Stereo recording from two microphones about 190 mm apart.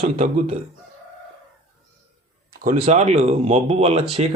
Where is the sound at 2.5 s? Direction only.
50° right (ahead or behind).